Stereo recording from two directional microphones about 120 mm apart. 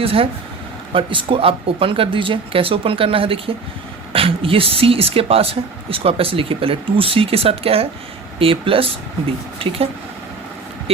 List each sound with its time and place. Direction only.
0.0 s speech: 50° right (ahead or behind)